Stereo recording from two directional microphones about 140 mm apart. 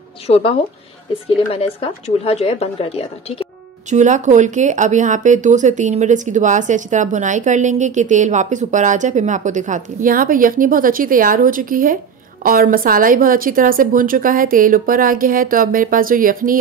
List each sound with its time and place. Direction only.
0.3 s speech: 45° left (ahead or behind)
3.9 s a woman's voice: 60° right (ahead or behind); by 12.0 s 80° right
12.4 s a woman's voice: 90° right